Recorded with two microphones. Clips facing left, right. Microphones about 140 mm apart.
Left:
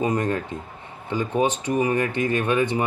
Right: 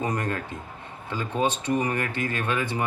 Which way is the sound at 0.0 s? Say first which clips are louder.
Left 5 dB; 15° left (ahead or behind).